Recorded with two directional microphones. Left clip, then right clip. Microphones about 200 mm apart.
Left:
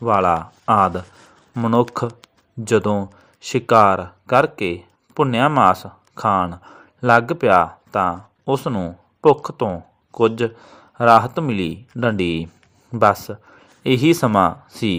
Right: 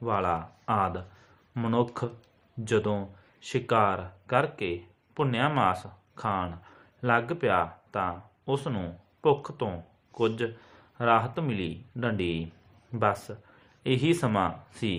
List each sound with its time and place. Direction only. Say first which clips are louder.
0.0 s speech: left 12 dB; 45° left (ahead or behind)